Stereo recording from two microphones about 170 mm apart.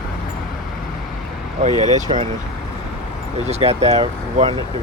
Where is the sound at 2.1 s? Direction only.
35° right (ahead or behind).